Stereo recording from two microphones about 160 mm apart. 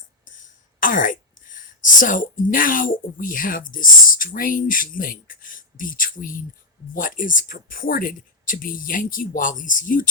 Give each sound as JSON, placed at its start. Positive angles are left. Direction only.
{"t": 0.8, "sound": "speech", "side_deg": 55}